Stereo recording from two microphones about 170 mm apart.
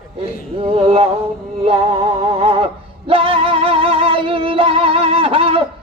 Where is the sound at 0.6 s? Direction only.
35° right (ahead or behind).